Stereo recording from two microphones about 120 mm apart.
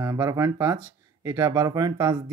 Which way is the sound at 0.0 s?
25° right (ahead or behind).